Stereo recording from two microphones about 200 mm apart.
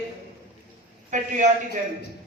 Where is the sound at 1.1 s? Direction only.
40° right (ahead or behind).